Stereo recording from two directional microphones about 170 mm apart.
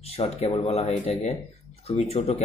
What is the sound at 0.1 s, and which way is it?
Speech, 35° left (ahead or behind).